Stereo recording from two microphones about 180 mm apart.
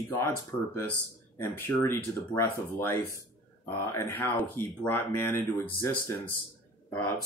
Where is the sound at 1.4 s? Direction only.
15° left (ahead or behind).